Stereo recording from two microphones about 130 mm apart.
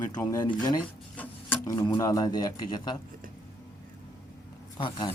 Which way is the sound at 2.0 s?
30° left (ahead or behind).